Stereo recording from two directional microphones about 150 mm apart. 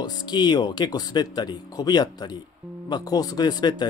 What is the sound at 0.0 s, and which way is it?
Speech, 30° left (ahead or behind).